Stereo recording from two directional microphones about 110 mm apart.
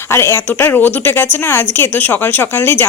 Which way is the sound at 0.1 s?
20° left (ahead or behind).